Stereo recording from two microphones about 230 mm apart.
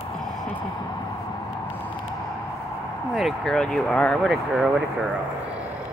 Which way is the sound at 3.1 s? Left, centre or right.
Centre.